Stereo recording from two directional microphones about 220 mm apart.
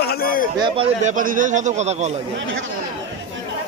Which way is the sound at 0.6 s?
25° right (ahead or behind).